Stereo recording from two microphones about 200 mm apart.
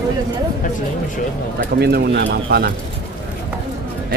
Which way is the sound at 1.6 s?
55° right (ahead or behind).